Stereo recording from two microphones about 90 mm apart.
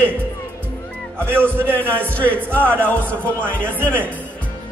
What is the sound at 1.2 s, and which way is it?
Music, 25° right (ahead or behind).